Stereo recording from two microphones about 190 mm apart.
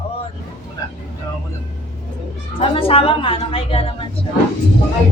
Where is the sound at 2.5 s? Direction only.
30° left (ahead or behind).